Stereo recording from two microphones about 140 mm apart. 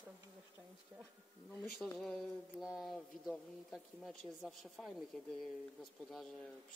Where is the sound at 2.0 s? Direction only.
Centre (ahead or behind).